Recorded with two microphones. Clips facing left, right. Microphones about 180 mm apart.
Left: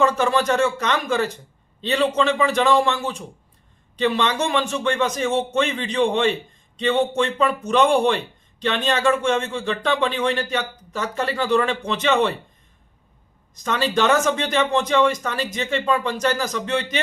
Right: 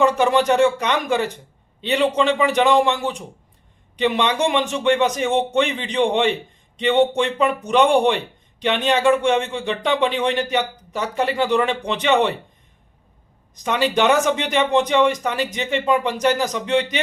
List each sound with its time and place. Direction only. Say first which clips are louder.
0.0 s a man's voice: right 2 dB; 15° right (ahead or behind)
13.6 s a man's voice: right 2 dB; 15° right (ahead or behind)